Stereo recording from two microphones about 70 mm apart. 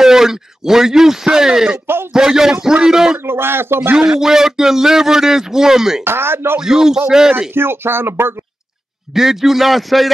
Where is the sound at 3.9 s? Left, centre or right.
Centre.